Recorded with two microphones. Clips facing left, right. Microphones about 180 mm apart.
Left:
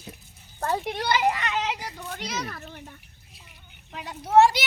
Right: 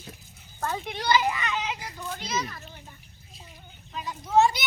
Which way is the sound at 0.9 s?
65° left (ahead or behind).